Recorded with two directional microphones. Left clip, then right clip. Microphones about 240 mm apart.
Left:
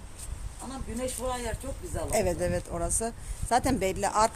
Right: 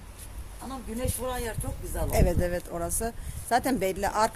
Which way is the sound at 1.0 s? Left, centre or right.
Right.